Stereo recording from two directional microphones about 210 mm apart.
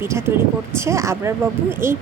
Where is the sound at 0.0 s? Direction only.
10° right (ahead or behind).